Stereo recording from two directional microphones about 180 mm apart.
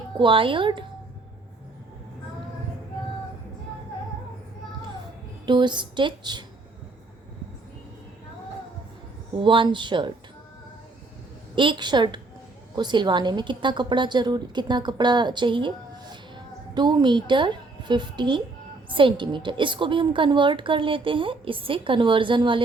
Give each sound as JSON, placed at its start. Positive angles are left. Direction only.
{"t": 0.2, "sound": "a woman's voice", "side_deg": -30}
{"t": 5.5, "sound": "a woman's voice", "side_deg": -25}
{"t": 9.3, "sound": "a woman's voice", "side_deg": -30}
{"t": 11.5, "sound": "a woman's voice", "side_deg": -25}